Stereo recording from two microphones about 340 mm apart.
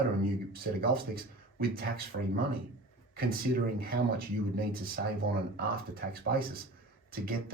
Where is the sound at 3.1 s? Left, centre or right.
Right.